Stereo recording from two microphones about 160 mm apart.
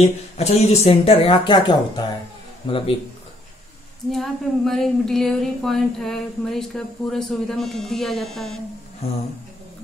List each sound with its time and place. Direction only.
0.0 s speech: 40° left (ahead or behind)
4.1 s speech: centre (ahead or behind)